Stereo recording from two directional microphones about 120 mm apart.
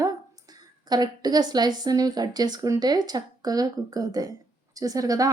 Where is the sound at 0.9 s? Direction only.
35° right (ahead or behind).